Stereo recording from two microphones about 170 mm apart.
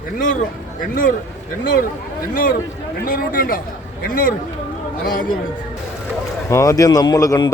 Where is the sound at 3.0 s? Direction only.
55° left (ahead or behind).